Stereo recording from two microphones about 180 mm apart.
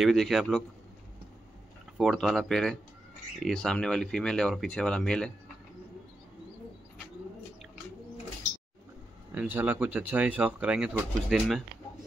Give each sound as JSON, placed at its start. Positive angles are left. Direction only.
{"t": 0.0, "sound": "speech", "side_deg": 0}
{"t": 2.0, "sound": "speech", "side_deg": 0}
{"t": 9.3, "sound": "speech", "side_deg": -10}